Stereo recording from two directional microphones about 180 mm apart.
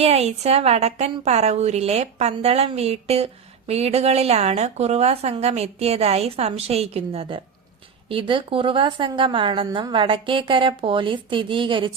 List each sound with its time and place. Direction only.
0.0 s a woman's voice: 35° right (ahead or behind)